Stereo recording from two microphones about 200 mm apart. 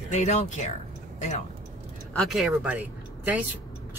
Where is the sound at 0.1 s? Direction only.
35° left (ahead or behind).